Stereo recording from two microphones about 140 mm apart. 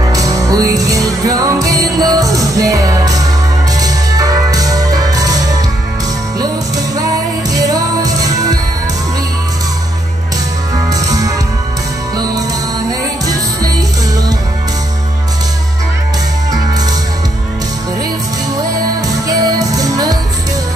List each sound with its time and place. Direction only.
0.0 s music: 25° right (ahead or behind)
7.5 s music: 25° right (ahead or behind)
10.9 s music: 25° right (ahead or behind)
13.2 s music: 25° right (ahead or behind)
19.2 s music: 25° right (ahead or behind)